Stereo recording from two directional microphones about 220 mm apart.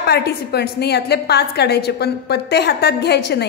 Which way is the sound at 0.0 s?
50° left (ahead or behind).